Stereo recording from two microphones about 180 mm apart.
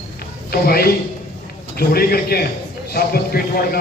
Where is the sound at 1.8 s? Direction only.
55° left (ahead or behind).